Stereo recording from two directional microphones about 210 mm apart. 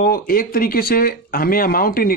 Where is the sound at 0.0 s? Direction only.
45° left (ahead or behind).